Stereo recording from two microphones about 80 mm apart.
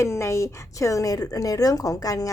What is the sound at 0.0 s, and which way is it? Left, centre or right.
A woman's voice, left.